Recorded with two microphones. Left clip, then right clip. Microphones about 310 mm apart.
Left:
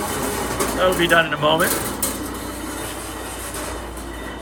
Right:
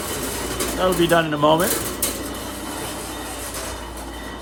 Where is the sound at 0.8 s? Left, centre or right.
Centre.